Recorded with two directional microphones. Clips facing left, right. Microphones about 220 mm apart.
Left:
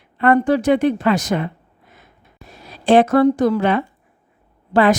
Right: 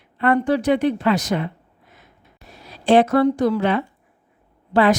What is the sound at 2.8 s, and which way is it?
A woman's voice, 50° left (ahead or behind).